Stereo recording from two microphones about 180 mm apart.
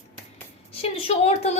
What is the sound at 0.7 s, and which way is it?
Speech, 35° left (ahead or behind).